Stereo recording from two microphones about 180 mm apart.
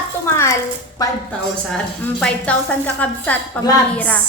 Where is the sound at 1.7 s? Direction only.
5° left (ahead or behind).